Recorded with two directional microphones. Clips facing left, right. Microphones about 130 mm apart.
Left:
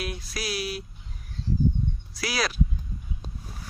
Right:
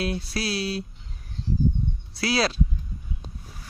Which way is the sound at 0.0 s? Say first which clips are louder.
Right 5 dB; 30° right (ahead or behind).